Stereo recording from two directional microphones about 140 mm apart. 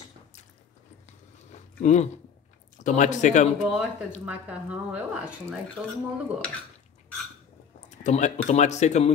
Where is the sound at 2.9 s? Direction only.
60° left (ahead or behind).